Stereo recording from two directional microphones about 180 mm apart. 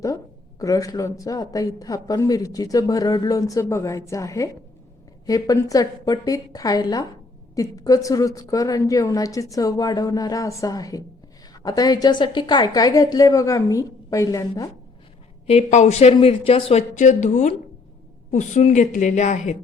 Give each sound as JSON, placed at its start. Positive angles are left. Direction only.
{"t": 0.6, "sound": "a woman's voice", "side_deg": 20}
{"t": 15.4, "sound": "speech", "side_deg": 40}